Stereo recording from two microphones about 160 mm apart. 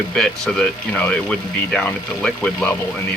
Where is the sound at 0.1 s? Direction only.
5° left (ahead or behind).